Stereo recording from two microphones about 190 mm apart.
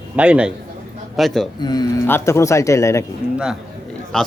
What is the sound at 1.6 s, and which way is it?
Speech, 20° left (ahead or behind).